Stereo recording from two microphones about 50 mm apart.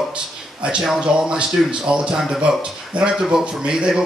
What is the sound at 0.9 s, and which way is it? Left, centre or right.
Speech, centre.